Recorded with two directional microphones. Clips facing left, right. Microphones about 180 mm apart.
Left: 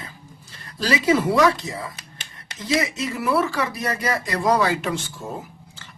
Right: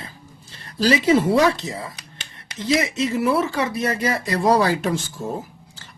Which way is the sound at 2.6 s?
25° right (ahead or behind).